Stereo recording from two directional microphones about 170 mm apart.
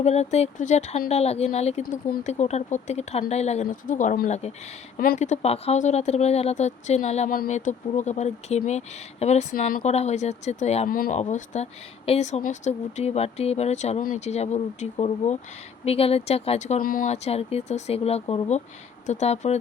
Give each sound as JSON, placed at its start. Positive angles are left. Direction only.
{"t": 0.0, "sound": "speech", "side_deg": 40}
{"t": 1.8, "sound": "speech", "side_deg": 60}
{"t": 2.3, "sound": "speech", "side_deg": 40}
{"t": 7.3, "sound": "speech", "side_deg": 50}
{"t": 9.8, "sound": "speech", "side_deg": 40}
{"t": 10.8, "sound": "speech", "side_deg": 55}
{"t": 11.2, "sound": "speech", "side_deg": 45}
{"t": 16.8, "sound": "speech", "side_deg": 55}
{"t": 17.1, "sound": "speech", "side_deg": 40}